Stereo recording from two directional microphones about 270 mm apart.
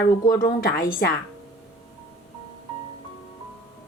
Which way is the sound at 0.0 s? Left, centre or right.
Left.